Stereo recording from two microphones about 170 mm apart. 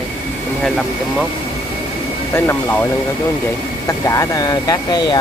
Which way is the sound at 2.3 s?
15° left (ahead or behind).